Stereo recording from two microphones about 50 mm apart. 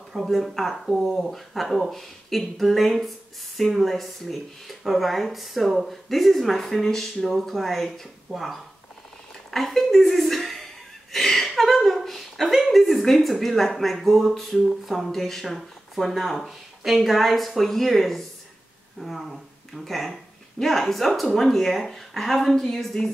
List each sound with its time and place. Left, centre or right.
0.1 s speech: centre
11.1 s a sound: centre
13.7 s speech: centre